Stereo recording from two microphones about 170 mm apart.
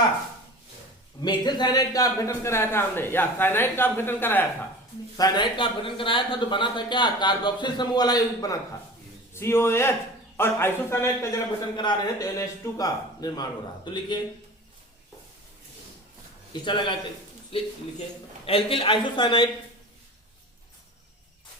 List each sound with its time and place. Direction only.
1.2 s a man's voice: 25° left (ahead or behind)
5.1 s a man's voice: 25° left (ahead or behind)
16.5 s a man's voice: 25° left (ahead or behind)